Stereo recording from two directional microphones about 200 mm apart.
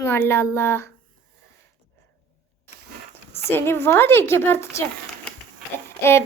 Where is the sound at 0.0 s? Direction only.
10° left (ahead or behind).